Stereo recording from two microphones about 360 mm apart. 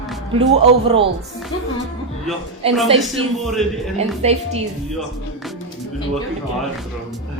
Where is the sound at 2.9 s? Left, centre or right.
Centre.